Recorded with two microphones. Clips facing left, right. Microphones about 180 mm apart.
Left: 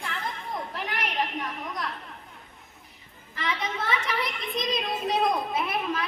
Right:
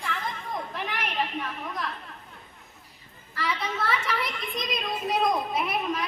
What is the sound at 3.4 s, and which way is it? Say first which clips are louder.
Children playing: right 1 dB; 20° left (ahead or behind).